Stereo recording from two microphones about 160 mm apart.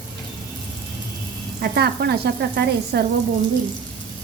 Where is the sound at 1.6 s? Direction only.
80° right.